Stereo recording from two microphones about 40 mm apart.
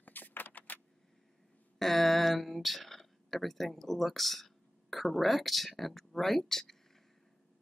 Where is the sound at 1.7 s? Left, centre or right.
Centre.